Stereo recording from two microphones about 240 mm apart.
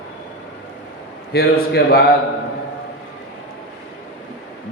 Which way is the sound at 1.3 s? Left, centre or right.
Left.